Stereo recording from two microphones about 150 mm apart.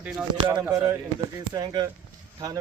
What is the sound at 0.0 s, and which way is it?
Speech, 5° right (ahead or behind).